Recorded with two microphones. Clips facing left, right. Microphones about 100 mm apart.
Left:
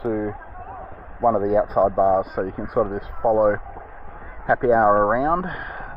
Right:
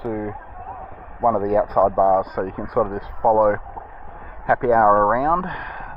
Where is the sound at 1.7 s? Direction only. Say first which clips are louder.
Right 1 dB; centre (ahead or behind).